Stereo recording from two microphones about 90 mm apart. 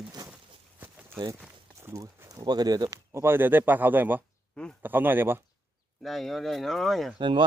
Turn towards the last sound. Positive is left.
turn(degrees=-60)  # may be behind; listen again after turning